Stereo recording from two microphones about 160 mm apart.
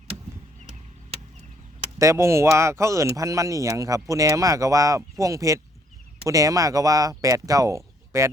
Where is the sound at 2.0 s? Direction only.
20° right (ahead or behind).